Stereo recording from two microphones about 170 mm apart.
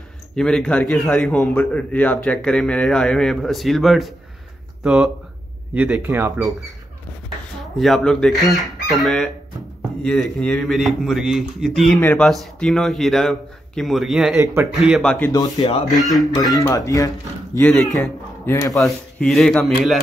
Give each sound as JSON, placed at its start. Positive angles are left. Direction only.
{"t": 0.4, "sound": "a man's voice", "side_deg": 5}
{"t": 7.7, "sound": "a man's voice", "side_deg": 0}
{"t": 14.4, "sound": "speech", "side_deg": -15}
{"t": 14.7, "sound": "a man's voice", "side_deg": 0}
{"t": 15.3, "sound": "speech", "side_deg": 25}
{"t": 15.9, "sound": "a man's voice", "side_deg": 0}
{"t": 16.3, "sound": "speech", "side_deg": 20}
{"t": 17.6, "sound": "a man's voice", "side_deg": 5}
{"t": 18.4, "sound": "speech", "side_deg": 15}
{"t": 18.9, "sound": "a man's voice", "side_deg": 0}